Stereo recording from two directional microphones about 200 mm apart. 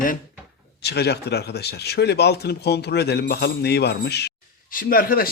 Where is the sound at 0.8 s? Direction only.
55° left (ahead or behind).